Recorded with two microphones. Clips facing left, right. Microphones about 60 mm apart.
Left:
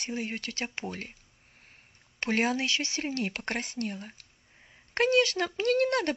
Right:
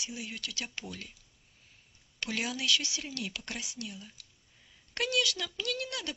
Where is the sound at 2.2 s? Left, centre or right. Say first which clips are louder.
Left 7 dB; left.